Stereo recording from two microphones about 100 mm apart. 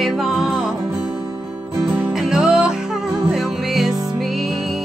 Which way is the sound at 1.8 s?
5° right (ahead or behind).